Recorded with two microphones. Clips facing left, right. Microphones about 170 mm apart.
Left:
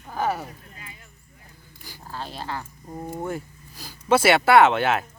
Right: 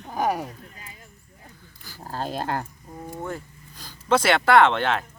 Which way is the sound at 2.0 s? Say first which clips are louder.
Right 5 dB; 45° right (ahead or behind).